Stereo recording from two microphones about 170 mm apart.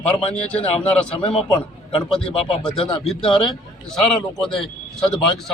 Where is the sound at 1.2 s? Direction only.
30° left (ahead or behind).